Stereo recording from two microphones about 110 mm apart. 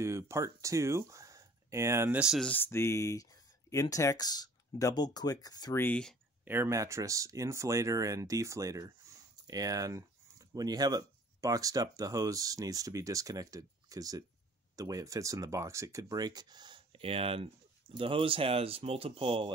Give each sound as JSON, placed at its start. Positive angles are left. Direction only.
{"t": 0.0, "sound": "speech", "side_deg": -25}
{"t": 2.1, "sound": "speech", "side_deg": -5}
{"t": 2.4, "sound": "speech", "side_deg": 15}
{"t": 6.4, "sound": "speech", "side_deg": -20}